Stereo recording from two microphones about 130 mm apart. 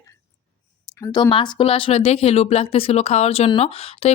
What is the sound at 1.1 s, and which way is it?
Speech, 35° left (ahead or behind).